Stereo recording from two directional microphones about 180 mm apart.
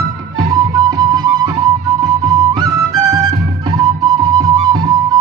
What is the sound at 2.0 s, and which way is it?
Flute, 20° right (ahead or behind).